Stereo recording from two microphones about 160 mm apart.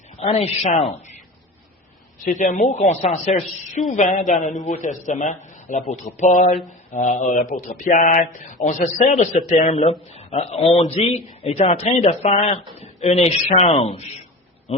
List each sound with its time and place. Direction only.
0.2 s a man's voice: 40° left (ahead or behind)
2.2 s a woman's voice: 50° left (ahead or behind)